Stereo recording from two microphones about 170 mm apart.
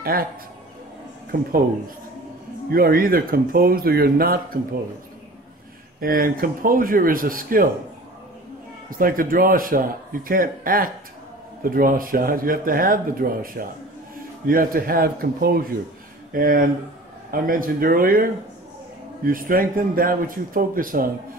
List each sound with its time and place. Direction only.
0.0 s a man's voice: 60° right (ahead or behind)
2.7 s speech: 60° right (ahead or behind)
5.9 s speech: 60° right (ahead or behind)
8.9 s speech: 55° right (ahead or behind)
19.2 s speech: 55° right (ahead or behind)